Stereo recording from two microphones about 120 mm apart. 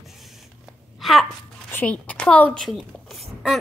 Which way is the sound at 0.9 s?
Centre (ahead or behind).